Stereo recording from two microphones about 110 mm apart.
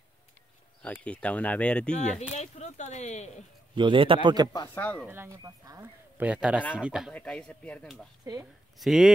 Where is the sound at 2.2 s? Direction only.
90° left.